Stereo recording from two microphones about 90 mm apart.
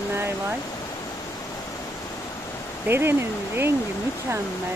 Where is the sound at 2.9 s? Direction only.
25° right (ahead or behind).